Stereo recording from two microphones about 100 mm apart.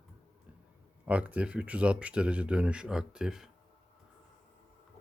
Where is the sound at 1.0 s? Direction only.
15° right (ahead or behind).